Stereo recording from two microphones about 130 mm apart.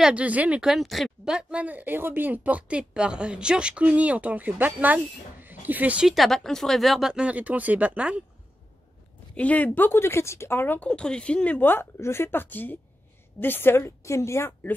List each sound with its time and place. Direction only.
0.0 s a woman's voice: 10° right (ahead or behind)
9.3 s a woman's voice: 10° left (ahead or behind)